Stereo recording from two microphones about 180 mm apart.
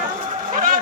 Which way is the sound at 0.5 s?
50° right (ahead or behind).